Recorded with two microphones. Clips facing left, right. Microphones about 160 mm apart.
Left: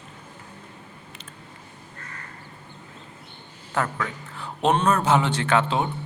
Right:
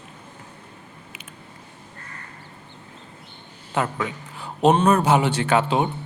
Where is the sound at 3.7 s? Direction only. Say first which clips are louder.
Right 2 dB; 20° right (ahead or behind).